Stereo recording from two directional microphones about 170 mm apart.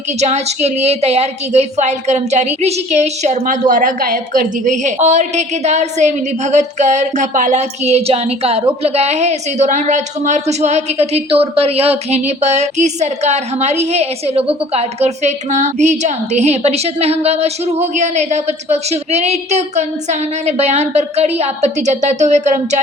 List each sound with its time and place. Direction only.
0.2 s a woman's voice: 40° right (ahead or behind)